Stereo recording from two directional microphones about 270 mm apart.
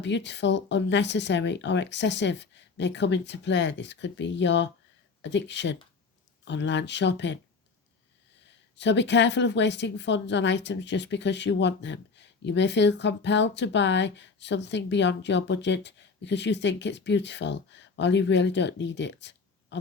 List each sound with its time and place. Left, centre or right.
0.0 s a woman's voice: left
8.8 s a woman's voice: left